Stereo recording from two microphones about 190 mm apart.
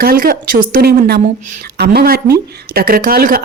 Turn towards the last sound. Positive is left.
turn(degrees=-50)  # may be behind; listen again after turning